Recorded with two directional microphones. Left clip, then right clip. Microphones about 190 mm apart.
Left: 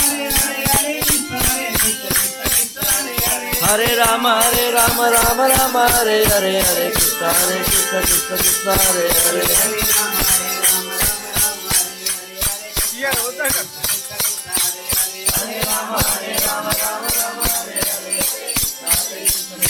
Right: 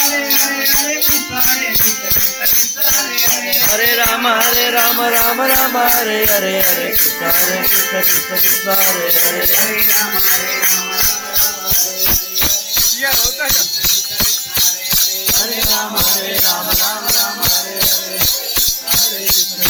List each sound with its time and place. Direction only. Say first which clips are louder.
3.8 s music: even; 20° left (ahead or behind)
4.2 s music: right 2 dB; 5° left (ahead or behind)